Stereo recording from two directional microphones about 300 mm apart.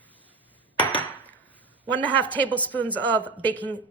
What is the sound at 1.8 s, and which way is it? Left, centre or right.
A woman's voice, centre.